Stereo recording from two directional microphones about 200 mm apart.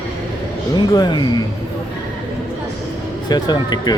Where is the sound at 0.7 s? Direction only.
20° left (ahead or behind).